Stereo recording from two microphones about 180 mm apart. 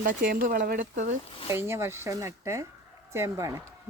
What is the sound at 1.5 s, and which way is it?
Speech, 15° right (ahead or behind).